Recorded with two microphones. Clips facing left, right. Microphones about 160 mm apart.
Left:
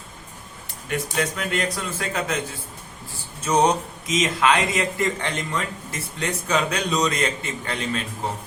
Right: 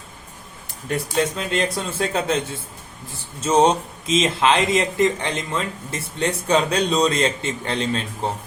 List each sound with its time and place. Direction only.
1.2 s a man's voice: 25° right (ahead or behind)
3.4 s a man's voice: 25° right (ahead or behind)